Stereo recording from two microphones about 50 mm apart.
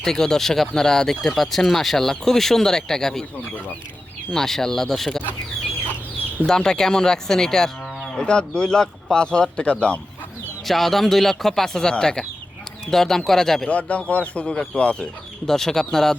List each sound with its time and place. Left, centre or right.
0.0 s speech: centre
4.3 s speech: centre
6.4 s speech: centre
10.7 s a man's voice: centre
13.7 s speech: left
15.4 s speech: centre